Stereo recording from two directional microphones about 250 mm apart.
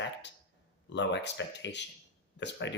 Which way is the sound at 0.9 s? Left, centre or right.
Left.